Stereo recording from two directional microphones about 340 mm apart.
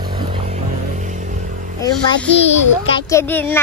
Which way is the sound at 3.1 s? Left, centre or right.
Centre.